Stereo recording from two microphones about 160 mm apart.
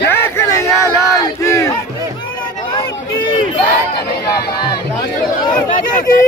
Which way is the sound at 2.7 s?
30° left (ahead or behind).